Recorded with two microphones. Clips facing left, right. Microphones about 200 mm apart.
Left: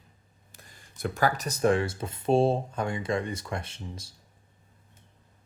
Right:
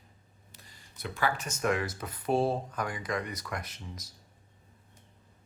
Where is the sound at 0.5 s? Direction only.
50° left (ahead or behind); by 4.1 s 30° left (ahead or behind).